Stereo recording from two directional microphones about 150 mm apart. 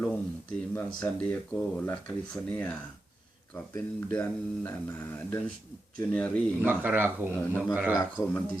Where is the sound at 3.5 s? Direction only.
15° left (ahead or behind).